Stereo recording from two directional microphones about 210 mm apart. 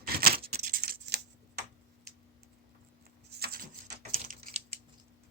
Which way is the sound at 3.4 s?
45° right (ahead or behind).